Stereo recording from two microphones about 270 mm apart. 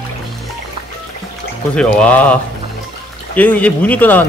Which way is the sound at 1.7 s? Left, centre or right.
Centre.